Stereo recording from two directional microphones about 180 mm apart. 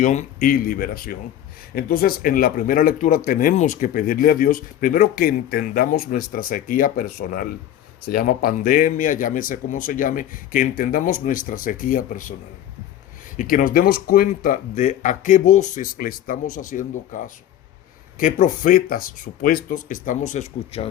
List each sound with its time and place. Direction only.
0.0 s speech: 45° left (ahead or behind)
13.3 s speech: 45° left (ahead or behind)